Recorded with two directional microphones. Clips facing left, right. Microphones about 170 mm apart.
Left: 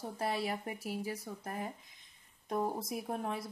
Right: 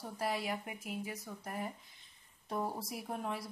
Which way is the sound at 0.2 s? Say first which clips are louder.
Left 1 dB; 30° left (ahead or behind).